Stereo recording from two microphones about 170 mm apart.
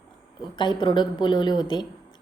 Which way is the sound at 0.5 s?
25° left (ahead or behind).